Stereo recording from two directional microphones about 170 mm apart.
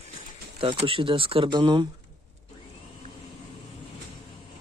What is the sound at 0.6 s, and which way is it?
Speech, 30° right (ahead or behind).